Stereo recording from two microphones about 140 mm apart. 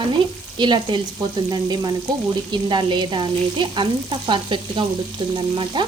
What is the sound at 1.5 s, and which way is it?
Frying, 30° right (ahead or behind).